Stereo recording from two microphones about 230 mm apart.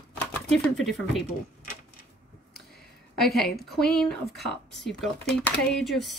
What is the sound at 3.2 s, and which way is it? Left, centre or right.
Speech, centre.